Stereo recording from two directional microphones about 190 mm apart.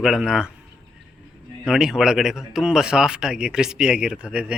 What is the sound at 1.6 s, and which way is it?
Speech, 5° right (ahead or behind).